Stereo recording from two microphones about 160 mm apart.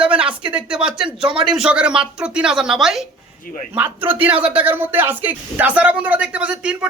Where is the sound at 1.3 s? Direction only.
35° right (ahead or behind).